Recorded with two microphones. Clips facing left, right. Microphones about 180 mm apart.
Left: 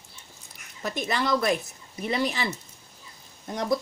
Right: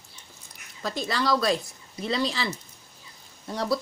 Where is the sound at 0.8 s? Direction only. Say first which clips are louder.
Even; 20° left (ahead or behind).